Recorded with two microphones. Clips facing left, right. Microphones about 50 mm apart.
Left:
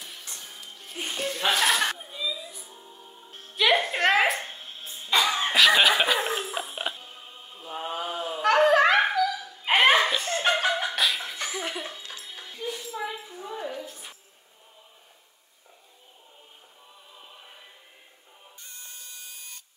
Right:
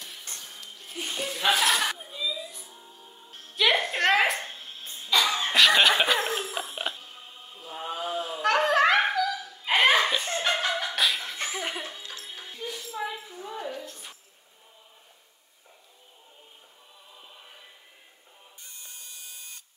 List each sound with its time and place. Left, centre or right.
0.4 s music: centre
3.0 s music: centre
3.5 s music: centre
5.2 s cough: centre
5.5 s cough: centre
6.1 s music: centre
9.6 s hiccup: left
10.5 s music: centre
11.3 s laughter: right
11.8 s music: centre
12.6 s a sound: centre
18.7 s a sound: left